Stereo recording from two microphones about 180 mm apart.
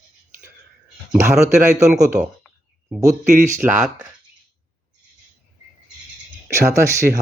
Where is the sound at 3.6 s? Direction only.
10° right (ahead or behind).